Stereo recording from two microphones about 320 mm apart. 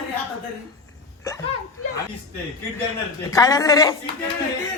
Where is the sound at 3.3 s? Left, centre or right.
Centre.